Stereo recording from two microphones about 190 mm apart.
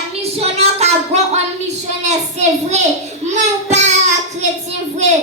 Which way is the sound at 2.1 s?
35° right (ahead or behind).